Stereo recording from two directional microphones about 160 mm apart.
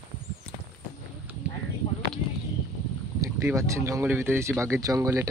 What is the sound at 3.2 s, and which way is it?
Speech, 20° right (ahead or behind).